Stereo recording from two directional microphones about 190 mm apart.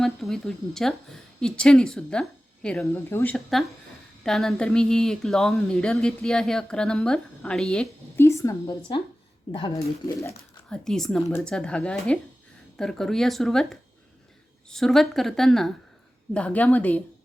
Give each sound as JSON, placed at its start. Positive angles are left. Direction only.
{"t": 0.0, "sound": "a woman's voice", "side_deg": 0}
{"t": 3.3, "sound": "speech", "side_deg": 0}
{"t": 9.5, "sound": "speech", "side_deg": 30}
{"t": 9.7, "sound": "a woman's voice", "side_deg": 15}
{"t": 10.7, "sound": "a woman's voice", "side_deg": 0}